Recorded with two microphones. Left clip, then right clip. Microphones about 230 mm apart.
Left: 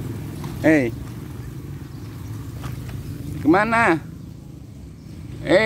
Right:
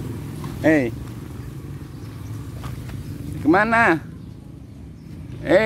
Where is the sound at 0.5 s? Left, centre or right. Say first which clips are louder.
Left 1 dB; centre.